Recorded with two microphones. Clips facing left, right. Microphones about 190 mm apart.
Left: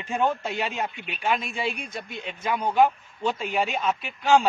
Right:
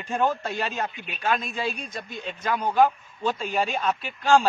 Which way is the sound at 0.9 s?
25° left (ahead or behind).